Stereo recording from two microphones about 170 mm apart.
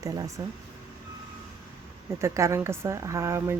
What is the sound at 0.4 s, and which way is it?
Speech, 20° right (ahead or behind).